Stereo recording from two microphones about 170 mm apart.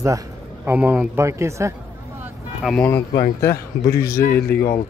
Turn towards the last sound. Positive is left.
turn(degrees=65)  # may be behind; listen again after turning